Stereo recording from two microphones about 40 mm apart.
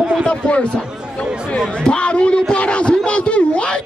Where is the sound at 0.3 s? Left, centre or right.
Left.